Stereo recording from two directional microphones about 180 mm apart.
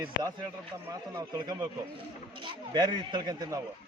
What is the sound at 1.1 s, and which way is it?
Speech, 20° right (ahead or behind).